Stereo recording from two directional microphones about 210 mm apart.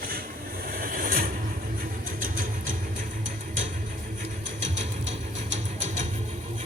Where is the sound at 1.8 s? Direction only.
40° right (ahead or behind).